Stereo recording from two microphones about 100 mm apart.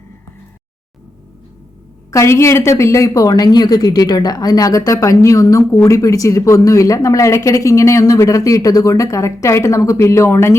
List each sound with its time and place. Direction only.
2.0 s a woman's voice: 30° left (ahead or behind)